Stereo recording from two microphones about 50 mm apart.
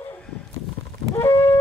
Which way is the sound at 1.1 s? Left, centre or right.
Left.